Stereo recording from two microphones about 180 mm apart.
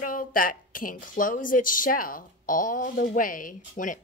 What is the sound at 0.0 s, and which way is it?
A woman's voice, 50° left (ahead or behind).